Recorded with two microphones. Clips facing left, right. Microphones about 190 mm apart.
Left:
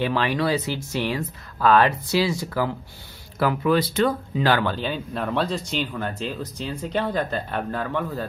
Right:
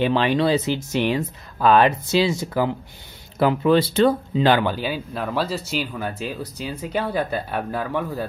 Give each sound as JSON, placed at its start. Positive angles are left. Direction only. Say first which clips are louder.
{"t": 0.0, "sound": "speech", "louder": "right 4 dB", "side_deg": -20}